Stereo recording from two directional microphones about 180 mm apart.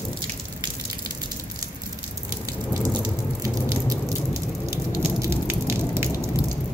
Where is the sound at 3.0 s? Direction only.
20° right (ahead or behind).